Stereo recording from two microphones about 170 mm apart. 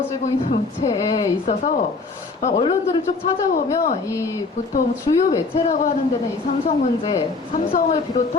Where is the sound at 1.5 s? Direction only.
45° left (ahead or behind).